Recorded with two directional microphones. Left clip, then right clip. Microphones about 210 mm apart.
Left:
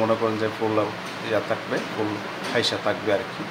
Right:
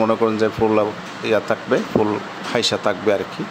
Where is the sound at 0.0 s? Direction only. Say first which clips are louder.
Right 5 dB; 30° right (ahead or behind).